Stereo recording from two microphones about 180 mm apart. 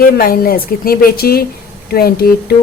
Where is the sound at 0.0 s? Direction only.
55° left (ahead or behind).